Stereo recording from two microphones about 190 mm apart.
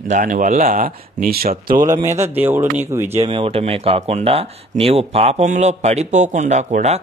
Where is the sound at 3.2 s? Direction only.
30° right (ahead or behind).